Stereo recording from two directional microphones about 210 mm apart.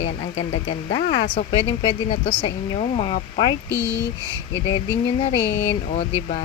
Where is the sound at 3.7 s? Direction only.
55° left (ahead or behind).